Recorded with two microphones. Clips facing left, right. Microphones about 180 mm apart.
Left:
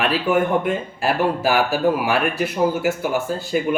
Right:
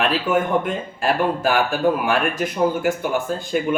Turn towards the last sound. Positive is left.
turn(degrees=5)  # may be behind; listen again after turning